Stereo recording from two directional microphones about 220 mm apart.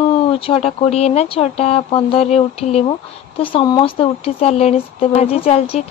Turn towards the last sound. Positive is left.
turn(degrees=25)  # may be behind; listen again after turning